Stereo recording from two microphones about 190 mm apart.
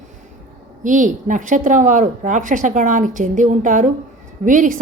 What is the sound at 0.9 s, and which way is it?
A woman's voice, 45° right (ahead or behind).